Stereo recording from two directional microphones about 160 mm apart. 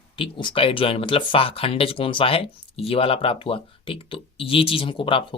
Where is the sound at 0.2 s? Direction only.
30° left (ahead or behind).